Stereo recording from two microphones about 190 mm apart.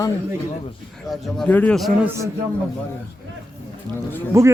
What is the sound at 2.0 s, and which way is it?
Speech, 15° right (ahead or behind).